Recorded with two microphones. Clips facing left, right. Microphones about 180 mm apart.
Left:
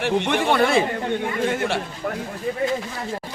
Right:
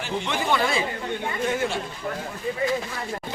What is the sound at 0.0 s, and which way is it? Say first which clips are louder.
Speech: left 7 dB; 70° left (ahead or behind).